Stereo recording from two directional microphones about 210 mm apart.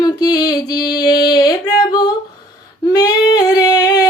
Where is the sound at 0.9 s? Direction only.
20° left (ahead or behind).